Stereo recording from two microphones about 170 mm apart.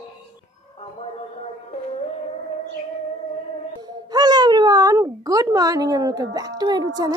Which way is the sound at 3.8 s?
25° right (ahead or behind).